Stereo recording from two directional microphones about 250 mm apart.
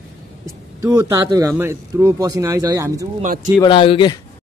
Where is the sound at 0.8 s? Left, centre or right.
Centre.